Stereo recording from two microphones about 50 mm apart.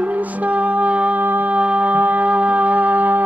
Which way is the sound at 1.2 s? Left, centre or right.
Right.